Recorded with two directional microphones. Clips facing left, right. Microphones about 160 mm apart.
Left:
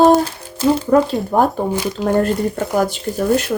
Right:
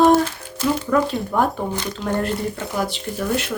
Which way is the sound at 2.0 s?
45° left (ahead or behind).